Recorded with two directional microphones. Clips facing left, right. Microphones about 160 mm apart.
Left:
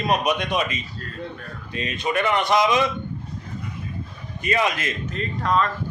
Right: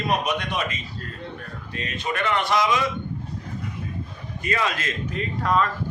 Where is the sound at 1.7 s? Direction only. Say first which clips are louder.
Left 4 dB; 15° left (ahead or behind).